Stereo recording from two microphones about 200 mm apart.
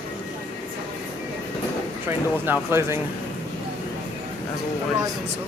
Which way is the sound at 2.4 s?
10° right (ahead or behind).